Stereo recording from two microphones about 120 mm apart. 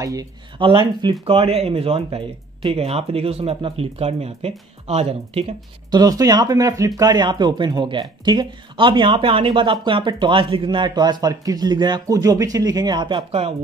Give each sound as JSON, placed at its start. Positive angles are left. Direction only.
{"t": 0.0, "sound": "speech", "side_deg": -30}
{"t": 0.6, "sound": "speech", "side_deg": -45}
{"t": 1.2, "sound": "speech", "side_deg": -55}
{"t": 5.9, "sound": "speech", "side_deg": -35}
{"t": 13.3, "sound": "speech", "side_deg": -55}